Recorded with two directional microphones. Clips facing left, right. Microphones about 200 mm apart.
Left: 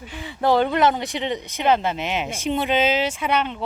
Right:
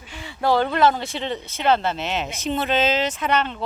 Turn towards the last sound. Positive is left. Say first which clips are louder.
# even
turn(degrees=10)  # may be behind; listen again after turning